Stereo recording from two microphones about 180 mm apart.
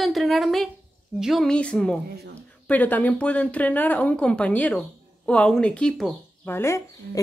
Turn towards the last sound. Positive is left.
turn(degrees=15)  # may be behind; listen again after turning